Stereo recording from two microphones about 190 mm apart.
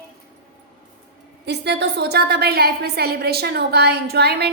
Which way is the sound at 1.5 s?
60° right (ahead or behind).